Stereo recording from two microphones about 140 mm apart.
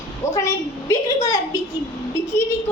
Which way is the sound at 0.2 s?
20° left (ahead or behind).